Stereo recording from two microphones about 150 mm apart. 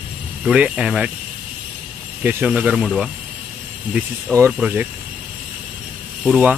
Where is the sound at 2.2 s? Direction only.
10° right (ahead or behind).